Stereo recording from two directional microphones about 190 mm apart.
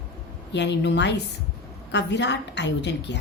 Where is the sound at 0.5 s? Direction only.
65° left (ahead or behind).